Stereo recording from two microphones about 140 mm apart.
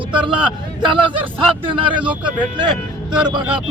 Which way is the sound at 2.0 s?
10° right (ahead or behind).